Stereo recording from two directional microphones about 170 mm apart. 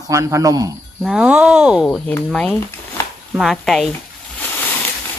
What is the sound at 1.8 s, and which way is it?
Speech, 5° left (ahead or behind).